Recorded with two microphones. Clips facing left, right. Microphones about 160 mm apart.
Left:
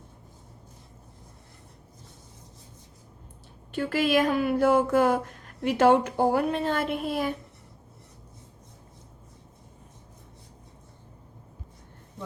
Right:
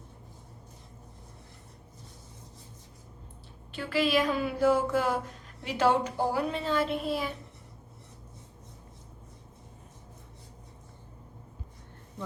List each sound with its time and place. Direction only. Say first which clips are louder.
3.7 s a woman's voice: left 3 dB; 50° left (ahead or behind)